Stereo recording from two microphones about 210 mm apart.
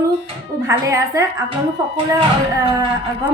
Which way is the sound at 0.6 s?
15° right (ahead or behind).